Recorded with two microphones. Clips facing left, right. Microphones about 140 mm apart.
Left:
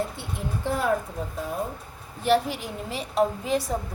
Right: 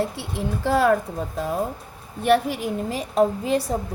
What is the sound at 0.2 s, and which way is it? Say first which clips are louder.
Speech: right 5 dB; 90° right.